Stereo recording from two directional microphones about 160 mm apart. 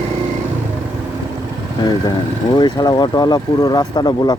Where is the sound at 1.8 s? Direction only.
25° left (ahead or behind).